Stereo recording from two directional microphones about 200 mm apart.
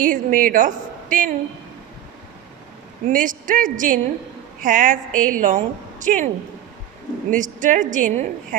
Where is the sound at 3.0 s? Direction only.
40° right (ahead or behind).